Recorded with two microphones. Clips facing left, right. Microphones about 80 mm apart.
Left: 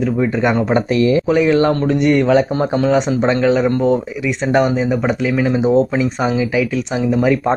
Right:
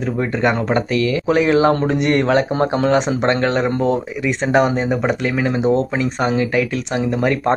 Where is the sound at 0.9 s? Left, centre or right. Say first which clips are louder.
Left 4 dB; left.